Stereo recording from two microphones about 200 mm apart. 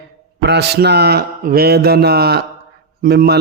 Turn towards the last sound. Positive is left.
turn(degrees=-50)  # may be behind; listen again after turning